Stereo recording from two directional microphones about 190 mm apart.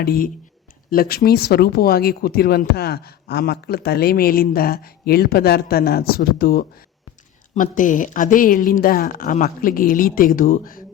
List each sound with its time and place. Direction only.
0.0 s speech: 55° left (ahead or behind)